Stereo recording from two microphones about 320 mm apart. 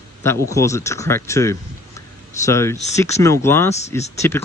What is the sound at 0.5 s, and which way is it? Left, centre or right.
Speech, centre.